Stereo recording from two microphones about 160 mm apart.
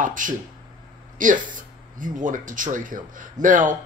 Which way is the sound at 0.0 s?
55° right (ahead or behind).